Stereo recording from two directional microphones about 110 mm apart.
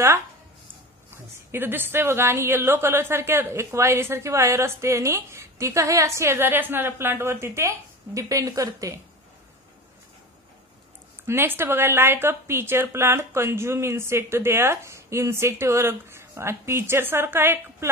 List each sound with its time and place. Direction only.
1.5 s a woman's voice: 20° right (ahead or behind)
11.2 s a woman's voice: 20° right (ahead or behind)